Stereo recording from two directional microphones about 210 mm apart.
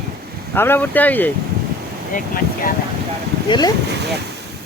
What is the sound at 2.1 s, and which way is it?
Speech, 40° left (ahead or behind).